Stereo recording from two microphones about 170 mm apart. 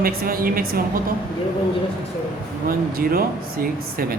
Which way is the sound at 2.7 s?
60° right (ahead or behind).